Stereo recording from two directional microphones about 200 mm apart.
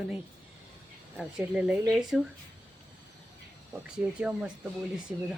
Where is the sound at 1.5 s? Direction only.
5° right (ahead or behind).